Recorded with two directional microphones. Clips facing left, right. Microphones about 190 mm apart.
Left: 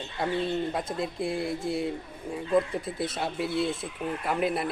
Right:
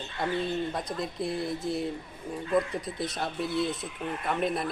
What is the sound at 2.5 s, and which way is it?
Speech, 25° left (ahead or behind).